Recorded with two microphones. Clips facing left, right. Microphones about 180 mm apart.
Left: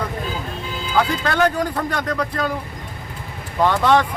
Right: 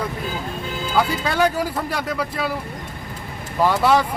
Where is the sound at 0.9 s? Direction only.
10° right (ahead or behind).